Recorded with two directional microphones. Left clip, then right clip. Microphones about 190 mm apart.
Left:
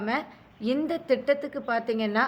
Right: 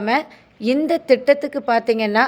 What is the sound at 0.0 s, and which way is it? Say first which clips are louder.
A woman's voice: right 10 dB; 40° right (ahead or behind).